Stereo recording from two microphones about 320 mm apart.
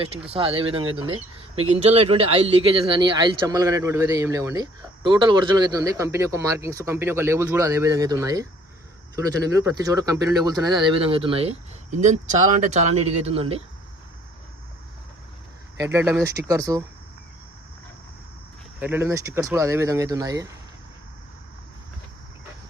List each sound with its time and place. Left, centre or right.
0.3 s speech: centre
15.8 s speech: centre
18.8 s speech: centre